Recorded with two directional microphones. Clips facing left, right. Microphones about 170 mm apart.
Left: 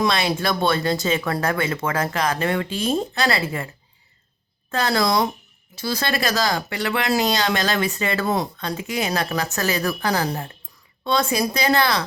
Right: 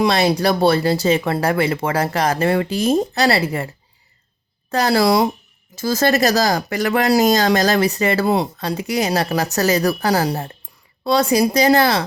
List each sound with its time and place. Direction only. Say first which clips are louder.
0.0 s speech: right 5 dB; 35° right (ahead or behind)
4.7 s speech: right 5 dB; 35° right (ahead or behind)
5.7 s speech: right 7 dB; 45° right (ahead or behind)